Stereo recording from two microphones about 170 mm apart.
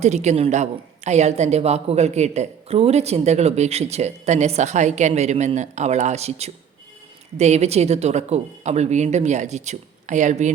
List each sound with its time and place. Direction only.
0.0 s a woman's voice: 40° right (ahead or behind)